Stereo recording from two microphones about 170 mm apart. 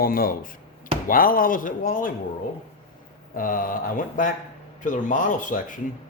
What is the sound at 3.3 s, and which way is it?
Speech, 55° left (ahead or behind).